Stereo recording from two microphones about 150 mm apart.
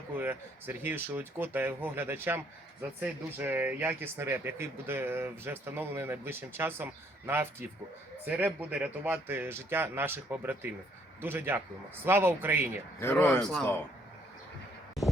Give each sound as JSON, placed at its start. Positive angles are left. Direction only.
{"t": 0.2, "sound": "speech", "side_deg": -15}
{"t": 13.0, "sound": "speech", "side_deg": 15}
{"t": 13.4, "sound": "a man's voice", "side_deg": 5}